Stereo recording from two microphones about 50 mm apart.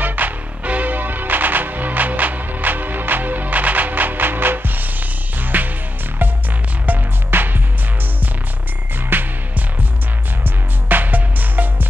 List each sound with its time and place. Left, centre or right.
0.0 s music: right
6.9 s music: right
9.1 s music: right
10.4 s music: right